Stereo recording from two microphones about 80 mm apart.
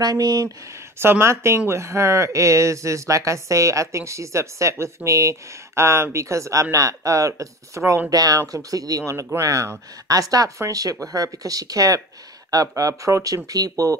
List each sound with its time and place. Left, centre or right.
0.0 s speech: right
0.9 s speech: right
8.1 s speech: right
9.1 s speech: right